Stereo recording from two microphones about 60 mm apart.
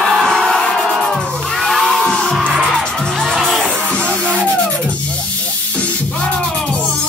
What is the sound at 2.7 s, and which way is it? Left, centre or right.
Music, centre.